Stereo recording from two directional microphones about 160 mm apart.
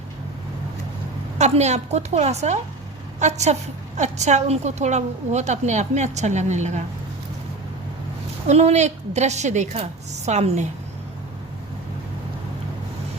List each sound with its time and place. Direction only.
1.4 s a woman's voice: 45° right (ahead or behind)
8.4 s a woman's voice: 45° right (ahead or behind)